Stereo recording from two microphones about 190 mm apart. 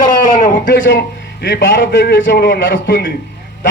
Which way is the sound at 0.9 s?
60° left (ahead or behind).